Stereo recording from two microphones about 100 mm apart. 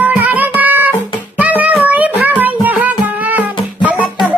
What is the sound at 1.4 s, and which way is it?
Child singing, 15° right (ahead or behind).